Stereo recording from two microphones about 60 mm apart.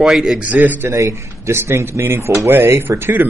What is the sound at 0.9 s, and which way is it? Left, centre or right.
Speech, right.